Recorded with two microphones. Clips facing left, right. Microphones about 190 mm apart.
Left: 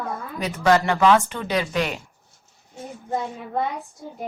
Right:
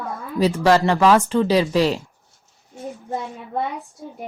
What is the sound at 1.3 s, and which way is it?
Speech, 30° right (ahead or behind).